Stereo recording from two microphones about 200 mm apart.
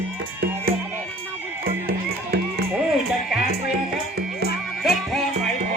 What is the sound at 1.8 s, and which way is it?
Music, 50° right (ahead or behind).